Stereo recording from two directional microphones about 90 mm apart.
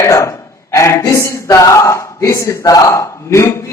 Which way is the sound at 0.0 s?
35° left (ahead or behind).